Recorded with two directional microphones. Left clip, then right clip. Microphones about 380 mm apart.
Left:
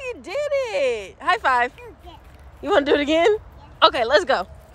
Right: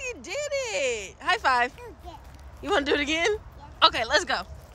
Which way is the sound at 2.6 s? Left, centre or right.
Centre.